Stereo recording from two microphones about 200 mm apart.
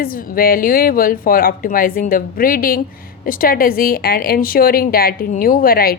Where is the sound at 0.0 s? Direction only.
45° left (ahead or behind).